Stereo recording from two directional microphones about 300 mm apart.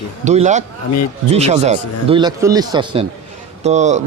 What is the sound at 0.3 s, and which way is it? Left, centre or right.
A man's voice, right.